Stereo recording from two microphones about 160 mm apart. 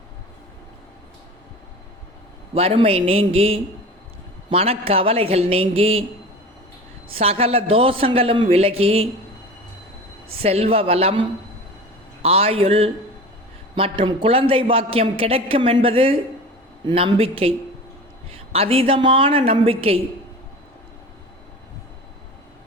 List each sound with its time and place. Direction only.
2.6 s a man's voice: 35° right (ahead or behind)
7.1 s a man's voice: 40° right (ahead or behind)
10.4 s a man's voice: 40° right (ahead or behind)